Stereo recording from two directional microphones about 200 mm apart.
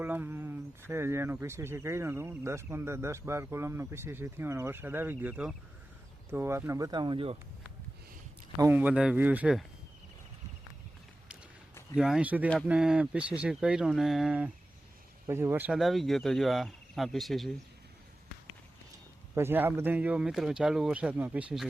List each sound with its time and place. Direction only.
0.0 s a sound: 10° right (ahead or behind)
0.9 s speech: 10° right (ahead or behind)
8.5 s speech: 10° right (ahead or behind)
11.9 s speech: 5° right (ahead or behind)
19.3 s speech: 10° right (ahead or behind)